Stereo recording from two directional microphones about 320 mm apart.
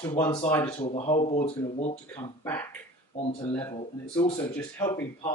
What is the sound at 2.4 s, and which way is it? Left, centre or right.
Speech, centre.